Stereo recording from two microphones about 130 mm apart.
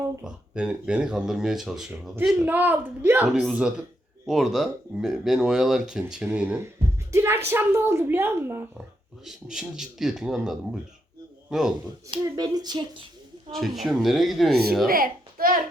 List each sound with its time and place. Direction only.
0.2 s a man's voice: 10° right (ahead or behind)
3.3 s a man's voice: 5° right (ahead or behind)
9.2 s speech: 5° right (ahead or behind)
12.2 s speech: 30° right (ahead or behind)
13.5 s speech: centre (ahead or behind)
14.8 s a child's voice: 90° right